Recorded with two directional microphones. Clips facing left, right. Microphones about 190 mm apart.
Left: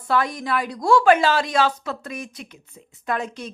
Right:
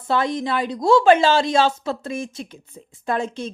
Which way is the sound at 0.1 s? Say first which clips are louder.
Right 1 dB; 25° right (ahead or behind).